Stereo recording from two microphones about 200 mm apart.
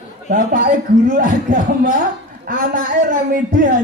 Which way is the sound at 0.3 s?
40° right (ahead or behind).